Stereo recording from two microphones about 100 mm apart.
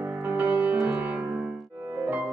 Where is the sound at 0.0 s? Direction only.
15° right (ahead or behind).